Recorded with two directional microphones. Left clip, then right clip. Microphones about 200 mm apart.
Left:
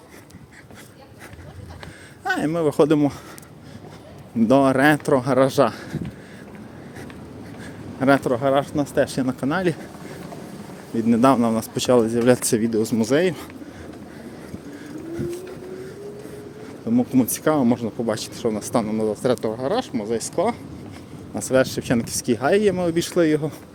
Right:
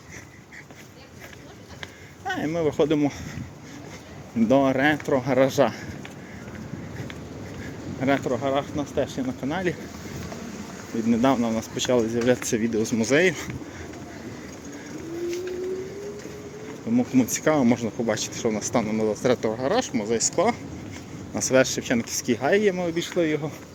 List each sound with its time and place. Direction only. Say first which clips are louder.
2.2 s speech: left 4 dB; 30° left (ahead or behind)
4.4 s speech: left 4 dB; 30° left (ahead or behind)
8.0 s speech: left 6 dB; 35° left (ahead or behind)
9.5 s speech: left 4 dB; 30° left (ahead or behind)
11.1 s speech: left 5 dB; 30° left (ahead or behind); by 13.5 s 15° left (ahead or behind)
16.9 s speech: left 2 dB; 20° left (ahead or behind)
21.8 s speech: left 2 dB; 25° left (ahead or behind)
23.0 s speech: left 5 dB; 40° left (ahead or behind)